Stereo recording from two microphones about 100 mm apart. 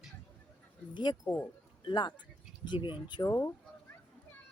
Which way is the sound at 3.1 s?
40° left (ahead or behind).